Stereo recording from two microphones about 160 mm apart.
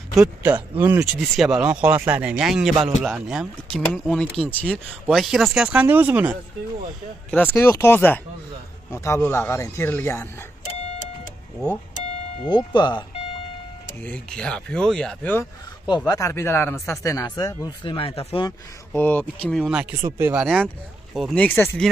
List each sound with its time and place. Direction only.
0.1 s speech: 5° right (ahead or behind)
7.2 s speech: 10° left (ahead or behind)
12.4 s speech: 30° left (ahead or behind)
14.0 s speech: 5° left (ahead or behind)
16.1 s speech: 20° left (ahead or behind); by 18.5 s 35° left (ahead or behind)
18.9 s speech: 10° left (ahead or behind)
19.6 s speech: 5° right (ahead or behind)
20.3 s speech: centre (ahead or behind)